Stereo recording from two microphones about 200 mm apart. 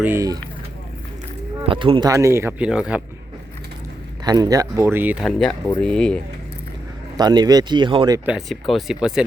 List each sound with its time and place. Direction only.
0.0 s speech: 15° right (ahead or behind)
1.6 s speech: 25° right (ahead or behind); by 3.0 s 5° right (ahead or behind)
4.2 s speech: 20° right (ahead or behind); by 6.1 s 5° left (ahead or behind)
7.2 s speech: 20° right (ahead or behind)
8.3 s speech: centre (ahead or behind)